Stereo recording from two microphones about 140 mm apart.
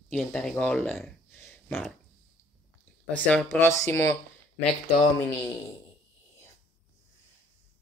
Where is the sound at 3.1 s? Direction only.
10° left (ahead or behind).